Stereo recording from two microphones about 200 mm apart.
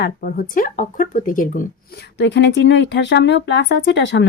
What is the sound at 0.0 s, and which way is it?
Speech, 45° left (ahead or behind).